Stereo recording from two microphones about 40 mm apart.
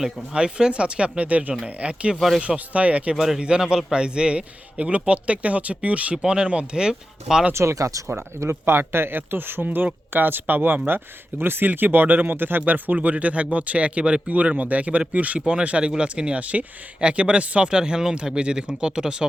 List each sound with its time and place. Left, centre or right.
0.3 s speech: right
3.2 s a man's voice: centre; by 6.1 s right
6.2 s speech: right
8.0 s speech: right
9.6 s speech: right
15.4 s speech: right
17.7 s speech: right